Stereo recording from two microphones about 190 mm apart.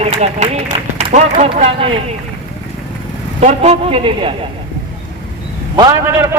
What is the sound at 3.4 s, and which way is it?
Speech, 35° right (ahead or behind).